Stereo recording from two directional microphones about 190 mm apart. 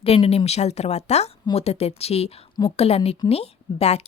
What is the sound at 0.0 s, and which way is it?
A woman's voice, 30° left (ahead or behind).